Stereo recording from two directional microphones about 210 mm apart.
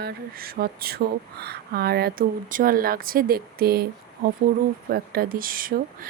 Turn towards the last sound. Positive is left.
turn(degrees=-40)  # may be behind; listen again after turning